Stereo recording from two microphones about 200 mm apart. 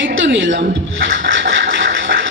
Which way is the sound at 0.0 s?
65° right (ahead or behind).